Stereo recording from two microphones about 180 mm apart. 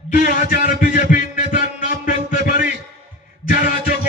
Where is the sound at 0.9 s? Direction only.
45° left (ahead or behind).